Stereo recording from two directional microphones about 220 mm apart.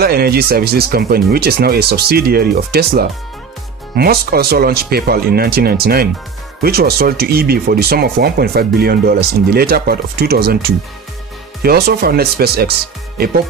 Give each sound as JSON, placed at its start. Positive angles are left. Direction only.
{"t": 0.0, "sound": "speech", "side_deg": -45}
{"t": 11.6, "sound": "speech", "side_deg": -45}